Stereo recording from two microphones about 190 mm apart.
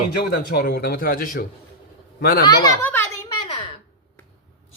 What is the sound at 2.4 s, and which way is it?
Speech, 20° left (ahead or behind).